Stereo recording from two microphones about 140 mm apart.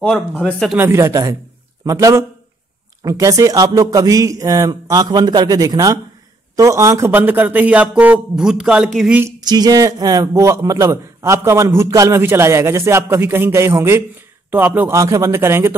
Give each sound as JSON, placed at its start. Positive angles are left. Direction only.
{"t": 0.0, "sound": "speech", "side_deg": 5}
{"t": 0.7, "sound": "a man's voice", "side_deg": -20}
{"t": 9.4, "sound": "a man's voice", "side_deg": -30}